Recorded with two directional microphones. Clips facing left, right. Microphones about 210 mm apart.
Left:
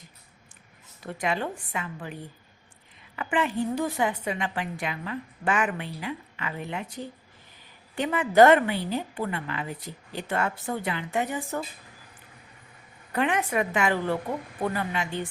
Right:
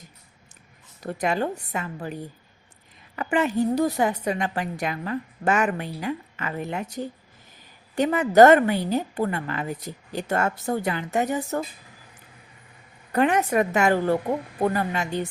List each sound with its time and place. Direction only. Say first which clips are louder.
1.0 s a woman's voice: right 4 dB; 40° right (ahead or behind)
3.2 s a woman's voice: right 4 dB; 40° right (ahead or behind)
13.1 s a woman's voice: right 5 dB; 40° right (ahead or behind)